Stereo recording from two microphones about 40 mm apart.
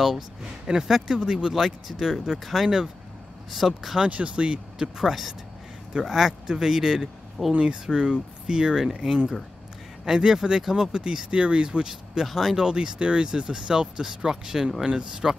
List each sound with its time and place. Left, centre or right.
0.0 s speech: centre
1.1 s speech: centre
1.5 s speech: centre
4.1 s speech: right
4.9 s speech: centre
12.3 s speech: centre
12.5 s speech: centre